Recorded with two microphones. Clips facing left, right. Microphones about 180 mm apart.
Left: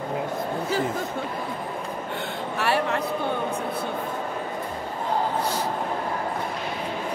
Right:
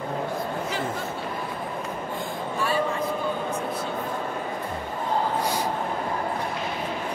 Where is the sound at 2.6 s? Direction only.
70° left (ahead or behind).